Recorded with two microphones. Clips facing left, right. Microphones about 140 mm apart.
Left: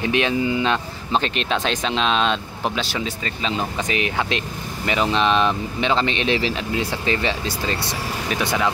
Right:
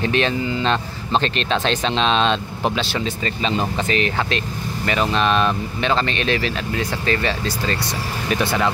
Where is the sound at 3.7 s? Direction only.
15° left (ahead or behind).